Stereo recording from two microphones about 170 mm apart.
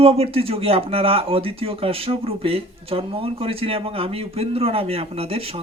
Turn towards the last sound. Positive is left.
turn(degrees=-35)  # may be behind; listen again after turning